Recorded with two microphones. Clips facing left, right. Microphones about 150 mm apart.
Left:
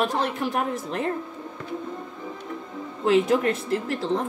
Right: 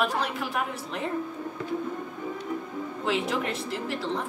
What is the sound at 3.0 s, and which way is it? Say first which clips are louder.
Speech: left 9 dB; 45° left (ahead or behind).